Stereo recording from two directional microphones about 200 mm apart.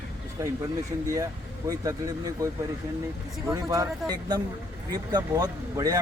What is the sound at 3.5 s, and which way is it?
Speech, 15° right (ahead or behind).